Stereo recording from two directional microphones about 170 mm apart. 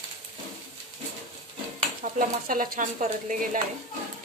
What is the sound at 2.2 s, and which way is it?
Speech, 55° right (ahead or behind).